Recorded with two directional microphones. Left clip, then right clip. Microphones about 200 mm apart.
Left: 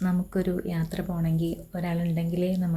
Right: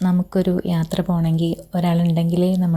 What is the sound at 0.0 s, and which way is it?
Speech, 30° right (ahead or behind).